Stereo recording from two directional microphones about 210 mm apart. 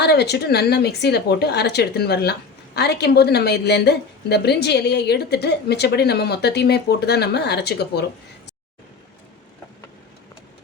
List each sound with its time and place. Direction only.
0.0 s a woman's voice: 50° left (ahead or behind)